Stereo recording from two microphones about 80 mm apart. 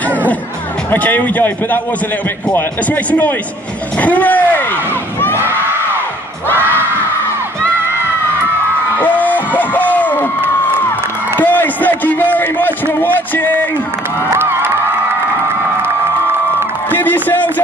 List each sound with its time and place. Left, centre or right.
0.8 s a man's voice: centre
8.9 s music: left
11.3 s a sound: left
13.0 s a man's voice: left
14.3 s music: right
15.8 s crowd: right
17.0 s a sound: left